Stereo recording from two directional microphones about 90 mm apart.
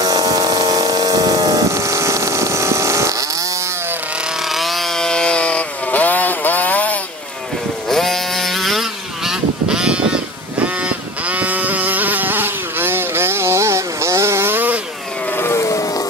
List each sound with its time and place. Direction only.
0.0 s vehicle: 45° right (ahead or behind)
4.5 s chainsaw: centre (ahead or behind); by 7.0 s 20° left (ahead or behind)
7.9 s vehicle: 5° left (ahead or behind); by 14.8 s 20° right (ahead or behind)
15.3 s vehicle: 30° left (ahead or behind)